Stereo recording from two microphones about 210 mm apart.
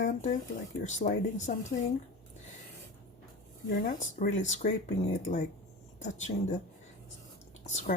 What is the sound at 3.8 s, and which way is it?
Speech, 40° left (ahead or behind).